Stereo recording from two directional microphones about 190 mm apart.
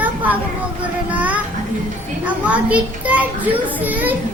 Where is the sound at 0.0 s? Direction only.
10° right (ahead or behind).